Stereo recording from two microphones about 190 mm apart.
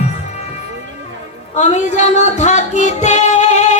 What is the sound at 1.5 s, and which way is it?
Music, 40° left (ahead or behind).